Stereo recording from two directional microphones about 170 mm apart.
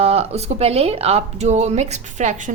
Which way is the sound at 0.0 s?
35° right (ahead or behind).